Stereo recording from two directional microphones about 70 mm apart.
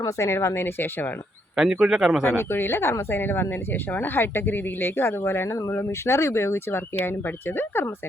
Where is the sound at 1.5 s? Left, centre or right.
Centre.